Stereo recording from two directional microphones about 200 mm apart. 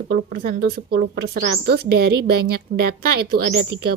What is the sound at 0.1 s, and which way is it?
A woman's voice, 50° right (ahead or behind).